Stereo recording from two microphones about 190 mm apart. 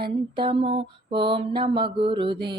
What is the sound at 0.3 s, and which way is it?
Mantra, 30° right (ahead or behind).